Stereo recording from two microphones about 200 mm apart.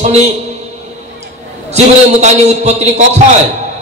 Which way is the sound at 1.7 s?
35° right (ahead or behind).